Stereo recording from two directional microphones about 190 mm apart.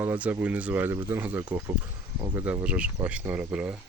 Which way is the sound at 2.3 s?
10° right (ahead or behind).